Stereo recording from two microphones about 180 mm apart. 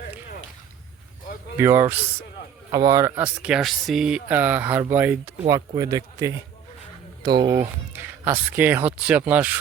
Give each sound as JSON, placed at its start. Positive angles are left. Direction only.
{"t": 1.5, "sound": "speech", "side_deg": -15}